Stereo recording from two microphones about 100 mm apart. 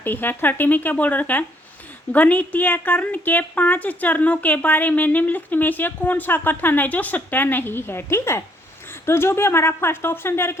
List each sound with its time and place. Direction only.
0.0 s a woman's voice: 20° left (ahead or behind)